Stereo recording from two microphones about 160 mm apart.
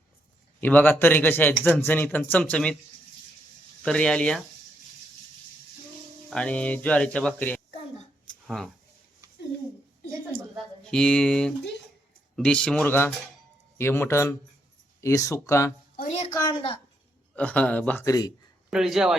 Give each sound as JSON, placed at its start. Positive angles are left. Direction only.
{"t": 0.6, "sound": "speech", "side_deg": 10}
{"t": 3.8, "sound": "speech", "side_deg": 5}
{"t": 6.3, "sound": "speech", "side_deg": 5}
{"t": 9.2, "sound": "a sound", "side_deg": -20}
{"t": 10.9, "sound": "speech", "side_deg": 5}
{"t": 16.4, "sound": "a woman's voice", "side_deg": 30}
{"t": 17.3, "sound": "speech", "side_deg": 10}
{"t": 18.0, "sound": "speech", "side_deg": 20}
{"t": 18.7, "sound": "speech", "side_deg": -5}